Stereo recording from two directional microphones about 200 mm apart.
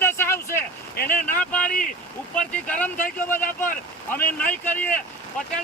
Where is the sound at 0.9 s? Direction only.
45° left (ahead or behind).